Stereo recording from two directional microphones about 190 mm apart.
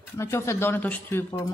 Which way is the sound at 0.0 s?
15° left (ahead or behind).